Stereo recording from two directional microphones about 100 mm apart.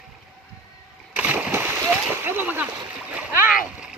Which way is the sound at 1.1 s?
15° right (ahead or behind).